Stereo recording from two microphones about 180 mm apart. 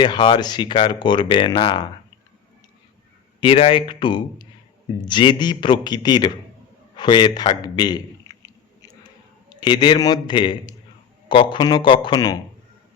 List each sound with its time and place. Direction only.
0.0 s speech: 25° left (ahead or behind)
3.4 s speech: 30° left (ahead or behind)
6.9 s a sound: 25° left (ahead or behind)
9.6 s speech: 25° left (ahead or behind)